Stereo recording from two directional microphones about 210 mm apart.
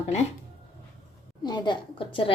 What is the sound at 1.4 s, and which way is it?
Speech, 20° left (ahead or behind).